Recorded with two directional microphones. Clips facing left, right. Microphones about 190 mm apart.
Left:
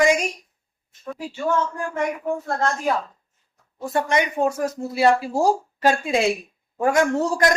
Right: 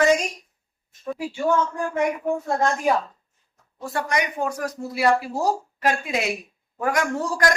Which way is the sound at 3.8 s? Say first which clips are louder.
Left 4 dB; 20° left (ahead or behind).